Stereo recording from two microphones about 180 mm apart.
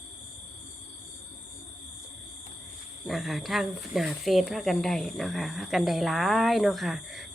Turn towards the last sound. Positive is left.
turn(degrees=0)  # may be behind; listen again after turning